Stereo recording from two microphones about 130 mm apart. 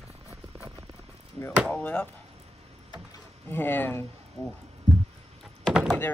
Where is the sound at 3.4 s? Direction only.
15° left (ahead or behind).